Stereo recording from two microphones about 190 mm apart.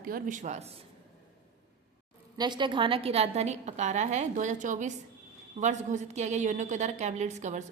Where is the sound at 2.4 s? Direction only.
25° right (ahead or behind).